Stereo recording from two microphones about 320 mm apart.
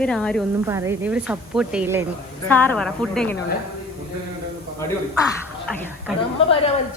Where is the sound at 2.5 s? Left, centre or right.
Centre.